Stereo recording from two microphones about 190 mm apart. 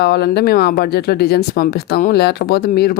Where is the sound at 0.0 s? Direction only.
60° left (ahead or behind).